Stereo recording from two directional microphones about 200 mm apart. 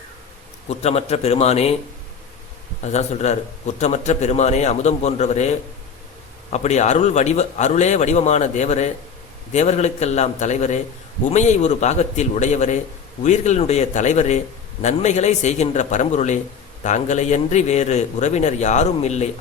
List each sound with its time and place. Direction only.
0.7 s a man's voice: 30° left (ahead or behind)
2.8 s a man's voice: 35° left (ahead or behind)